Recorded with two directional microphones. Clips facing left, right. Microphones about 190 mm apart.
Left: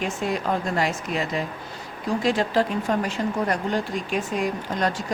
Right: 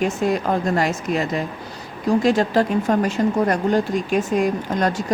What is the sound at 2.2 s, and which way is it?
Speech, 45° right (ahead or behind).